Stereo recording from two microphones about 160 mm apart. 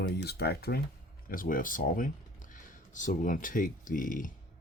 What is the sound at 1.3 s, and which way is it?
Speech, 60° left (ahead or behind).